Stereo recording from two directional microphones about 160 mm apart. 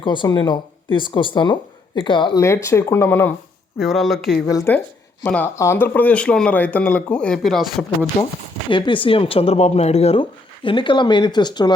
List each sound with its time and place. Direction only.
0.0 s speech: 30° left (ahead or behind)
2.4 s speech: 15° left (ahead or behind)
3.8 s speech: centre (ahead or behind)
4.4 s speech: 15° left (ahead or behind); by 7.9 s centre (ahead or behind)
8.1 s speech: 20° left (ahead or behind)
8.7 s speech: 30° left (ahead or behind)